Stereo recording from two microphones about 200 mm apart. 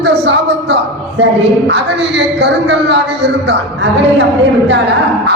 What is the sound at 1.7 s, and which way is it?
A man's voice, 60° right (ahead or behind).